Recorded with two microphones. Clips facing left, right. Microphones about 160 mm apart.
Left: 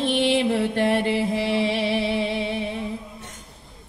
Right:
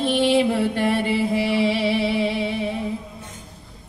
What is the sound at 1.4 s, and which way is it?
Music, 10° right (ahead or behind).